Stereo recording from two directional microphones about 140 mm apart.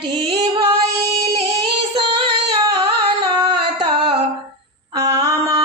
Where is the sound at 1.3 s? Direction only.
40° right (ahead or behind).